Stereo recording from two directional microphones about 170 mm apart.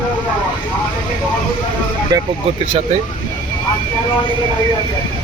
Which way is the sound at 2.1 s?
20° right (ahead or behind).